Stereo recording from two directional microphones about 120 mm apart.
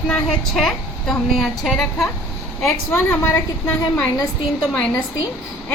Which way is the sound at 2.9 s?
20° left (ahead or behind).